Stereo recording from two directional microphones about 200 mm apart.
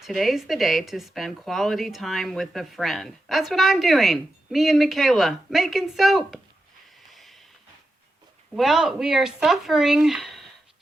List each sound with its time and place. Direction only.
0.0 s speech: centre (ahead or behind)
7.1 s a sound: centre (ahead or behind)
8.5 s speech: centre (ahead or behind)